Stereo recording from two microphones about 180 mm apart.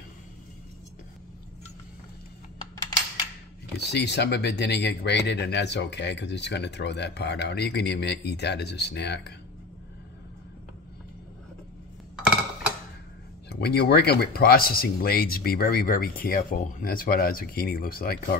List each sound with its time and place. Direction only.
3.7 s speech: 70° left (ahead or behind)
13.5 s speech: 60° left (ahead or behind)